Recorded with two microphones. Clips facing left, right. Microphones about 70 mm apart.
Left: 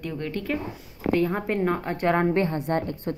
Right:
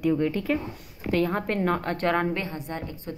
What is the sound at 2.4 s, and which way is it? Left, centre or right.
Speech, left.